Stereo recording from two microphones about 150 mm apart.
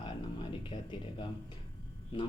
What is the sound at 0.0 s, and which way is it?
Music, 35° left (ahead or behind).